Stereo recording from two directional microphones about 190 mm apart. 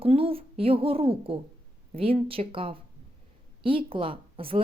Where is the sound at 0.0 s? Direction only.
30° right (ahead or behind).